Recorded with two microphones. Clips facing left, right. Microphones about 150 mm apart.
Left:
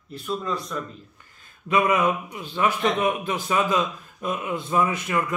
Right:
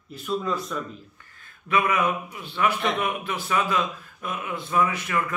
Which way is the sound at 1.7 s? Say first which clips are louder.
Left 2 dB; 20° left (ahead or behind).